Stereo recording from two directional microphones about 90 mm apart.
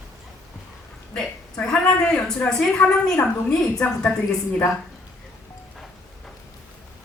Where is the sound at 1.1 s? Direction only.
10° left (ahead or behind).